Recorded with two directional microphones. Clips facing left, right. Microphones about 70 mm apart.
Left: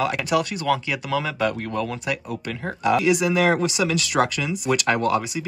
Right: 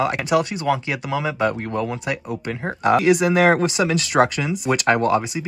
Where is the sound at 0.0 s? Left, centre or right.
Right.